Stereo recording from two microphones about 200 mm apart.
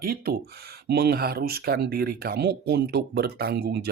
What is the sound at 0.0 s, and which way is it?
Speech, 45° right (ahead or behind).